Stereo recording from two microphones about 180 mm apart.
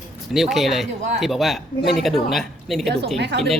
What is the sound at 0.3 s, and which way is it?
Speech, centre (ahead or behind).